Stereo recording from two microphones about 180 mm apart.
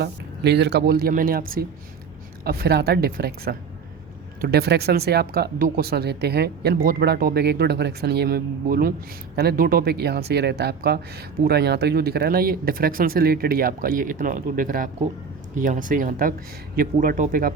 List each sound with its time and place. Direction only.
0.0 s speech: 70° right (ahead or behind); by 17.5 s 50° right (ahead or behind)